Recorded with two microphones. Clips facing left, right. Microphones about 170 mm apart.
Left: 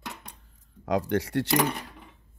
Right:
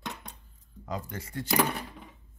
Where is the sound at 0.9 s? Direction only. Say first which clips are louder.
Left 11 dB; 75° left (ahead or behind).